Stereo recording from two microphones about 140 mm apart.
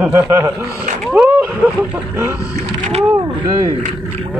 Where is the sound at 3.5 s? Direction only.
25° right (ahead or behind).